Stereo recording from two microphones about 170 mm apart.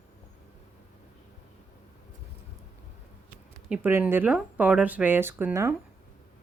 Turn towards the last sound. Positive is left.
turn(degrees=-15)  # may be behind; listen again after turning